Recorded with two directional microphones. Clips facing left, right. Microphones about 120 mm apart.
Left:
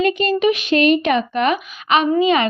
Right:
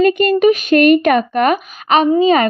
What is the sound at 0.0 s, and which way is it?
Speech, 50° right (ahead or behind).